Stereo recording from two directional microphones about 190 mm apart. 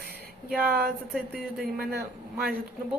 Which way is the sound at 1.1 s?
Centre (ahead or behind).